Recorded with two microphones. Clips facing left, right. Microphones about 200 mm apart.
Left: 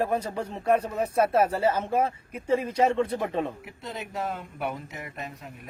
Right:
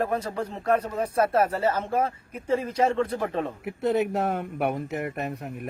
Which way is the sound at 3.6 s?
60° right (ahead or behind).